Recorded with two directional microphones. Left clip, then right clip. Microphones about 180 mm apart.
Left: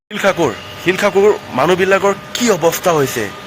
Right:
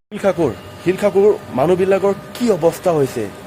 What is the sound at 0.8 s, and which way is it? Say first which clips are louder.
A man's voice: left 2 dB; centre (ahead or behind).